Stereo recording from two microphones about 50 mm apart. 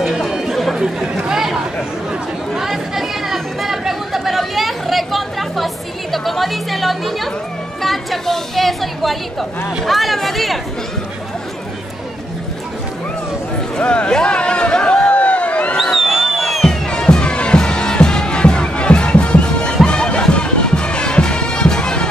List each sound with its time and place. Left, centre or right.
0.7 s speech: centre
2.5 s chatter: centre
6.1 s speech: centre
13.7 s a sound: left
15.8 s music: centre
16.6 s music: centre